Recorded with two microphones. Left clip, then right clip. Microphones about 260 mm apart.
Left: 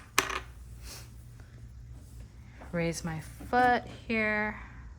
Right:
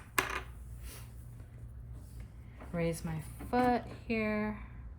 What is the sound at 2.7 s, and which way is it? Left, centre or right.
A woman's voice, left.